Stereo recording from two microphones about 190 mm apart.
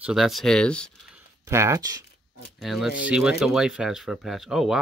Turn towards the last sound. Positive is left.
turn(degrees=0)  # may be behind; listen again after turning